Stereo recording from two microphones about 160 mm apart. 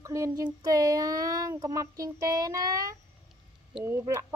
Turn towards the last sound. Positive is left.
turn(degrees=-15)  # may be behind; listen again after turning